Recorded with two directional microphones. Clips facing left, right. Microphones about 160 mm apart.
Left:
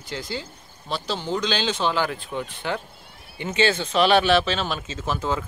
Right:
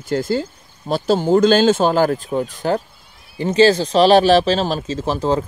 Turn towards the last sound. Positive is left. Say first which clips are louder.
# right 7 dB
turn(degrees=-35)  # may be behind; listen again after turning